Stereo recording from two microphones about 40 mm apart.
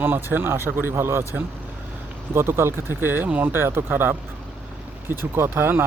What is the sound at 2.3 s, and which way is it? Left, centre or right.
Speech, right.